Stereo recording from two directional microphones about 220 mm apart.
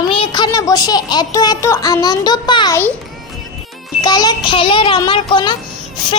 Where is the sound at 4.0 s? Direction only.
20° left (ahead or behind).